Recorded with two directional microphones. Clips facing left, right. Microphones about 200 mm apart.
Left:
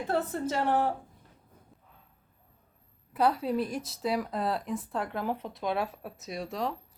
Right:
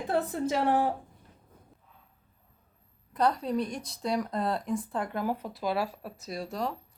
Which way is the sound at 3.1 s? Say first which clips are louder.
Left 1 dB; 5° left (ahead or behind).